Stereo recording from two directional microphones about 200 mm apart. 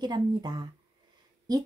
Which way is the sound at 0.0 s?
20° right (ahead or behind).